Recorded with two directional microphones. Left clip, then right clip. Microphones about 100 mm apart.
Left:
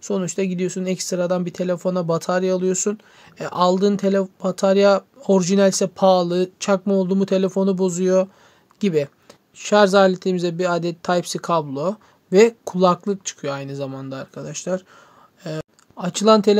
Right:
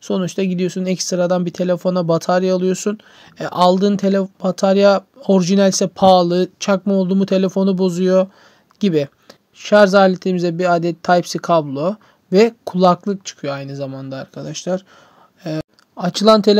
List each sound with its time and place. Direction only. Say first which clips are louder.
0.0 s speech: right 3 dB; 35° right (ahead or behind)
8.7 s a sound: right 3 dB; 35° right (ahead or behind)
9.6 s speech: right 3 dB; 25° right (ahead or behind)